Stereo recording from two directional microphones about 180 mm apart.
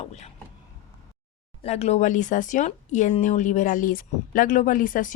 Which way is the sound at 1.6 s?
35° left (ahead or behind).